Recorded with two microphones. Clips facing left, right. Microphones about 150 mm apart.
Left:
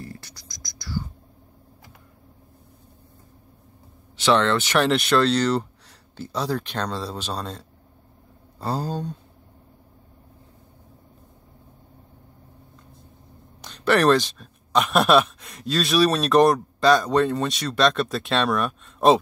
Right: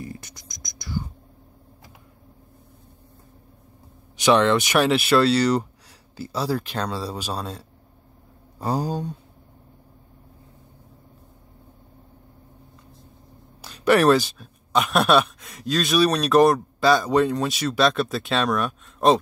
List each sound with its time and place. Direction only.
0.0 s whispering: 20° right (ahead or behind)
4.2 s speech: 15° right (ahead or behind)
13.6 s speech: 5° right (ahead or behind)